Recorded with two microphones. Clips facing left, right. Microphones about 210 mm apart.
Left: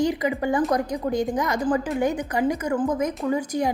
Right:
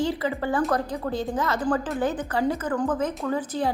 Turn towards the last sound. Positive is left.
turn(degrees=15)  # may be behind; listen again after turning